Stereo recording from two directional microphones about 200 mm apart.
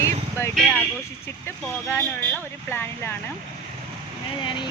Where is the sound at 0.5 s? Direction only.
5° left (ahead or behind).